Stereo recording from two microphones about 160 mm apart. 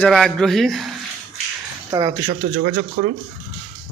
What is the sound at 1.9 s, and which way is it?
Speech, 25° right (ahead or behind).